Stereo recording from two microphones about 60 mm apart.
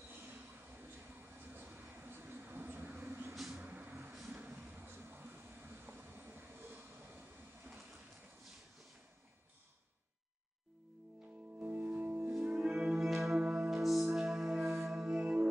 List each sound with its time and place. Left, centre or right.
1.5 s vehicle: right
11.6 s music: right
12.5 s music: centre